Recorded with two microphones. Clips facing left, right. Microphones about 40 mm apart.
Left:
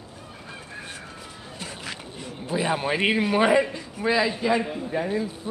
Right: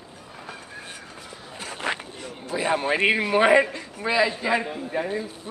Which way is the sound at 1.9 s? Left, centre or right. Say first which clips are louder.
Right 11 dB; right.